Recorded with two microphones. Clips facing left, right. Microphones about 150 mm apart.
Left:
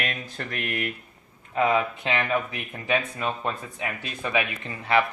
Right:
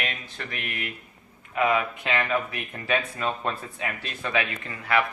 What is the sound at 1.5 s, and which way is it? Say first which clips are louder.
Speech: left 1 dB; 30° left (ahead or behind).